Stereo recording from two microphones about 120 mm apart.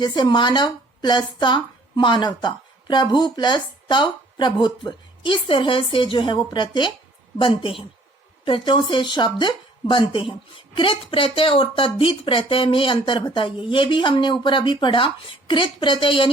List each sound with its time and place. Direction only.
0.0 s a woman's voice: 40° left (ahead or behind)